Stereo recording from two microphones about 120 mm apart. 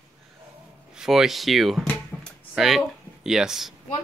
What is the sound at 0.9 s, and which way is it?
Speech, 5° right (ahead or behind).